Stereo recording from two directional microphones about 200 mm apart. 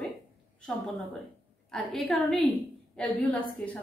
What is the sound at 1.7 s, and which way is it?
A woman's voice, centre (ahead or behind).